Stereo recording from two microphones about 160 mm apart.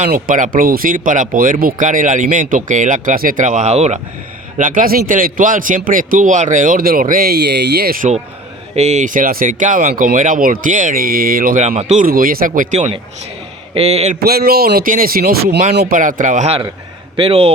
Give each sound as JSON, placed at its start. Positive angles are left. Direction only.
{"t": 0.1, "sound": "speech", "side_deg": -55}
{"t": 4.5, "sound": "a man's voice", "side_deg": -55}
{"t": 8.7, "sound": "a man's voice", "side_deg": -45}
{"t": 11.8, "sound": "speech", "side_deg": -45}
{"t": 12.0, "sound": "a man's voice", "side_deg": -65}
{"t": 13.7, "sound": "speech", "side_deg": -40}
{"t": 14.3, "sound": "speech", "side_deg": -70}
{"t": 15.7, "sound": "speech", "side_deg": -90}
{"t": 16.0, "sound": "speech", "side_deg": -55}
{"t": 17.2, "sound": "speech", "side_deg": -35}